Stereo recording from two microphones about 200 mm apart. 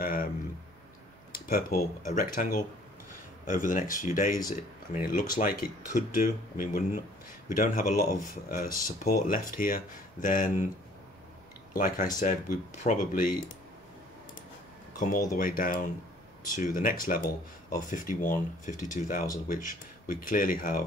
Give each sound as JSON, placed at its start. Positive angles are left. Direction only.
{"t": 0.0, "sound": "speech", "side_deg": 45}
{"t": 1.3, "sound": "speech", "side_deg": 45}
{"t": 11.7, "sound": "speech", "side_deg": 45}
{"t": 15.0, "sound": "speech", "side_deg": 40}